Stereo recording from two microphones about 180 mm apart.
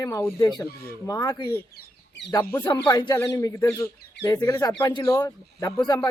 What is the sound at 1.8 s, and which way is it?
Chicken, 75° left (ahead or behind).